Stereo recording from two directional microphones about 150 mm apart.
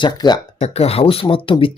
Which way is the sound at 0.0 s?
30° left (ahead or behind).